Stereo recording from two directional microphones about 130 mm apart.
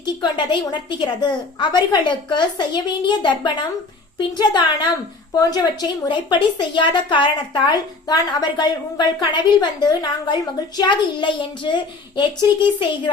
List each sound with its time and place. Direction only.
0.0 s a woman's voice: 35° left (ahead or behind)